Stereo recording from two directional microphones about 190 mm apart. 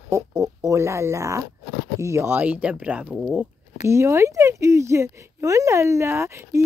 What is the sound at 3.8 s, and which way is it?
Speech, 15° right (ahead or behind).